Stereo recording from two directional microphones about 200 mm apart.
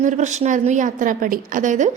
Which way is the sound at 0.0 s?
35° right (ahead or behind).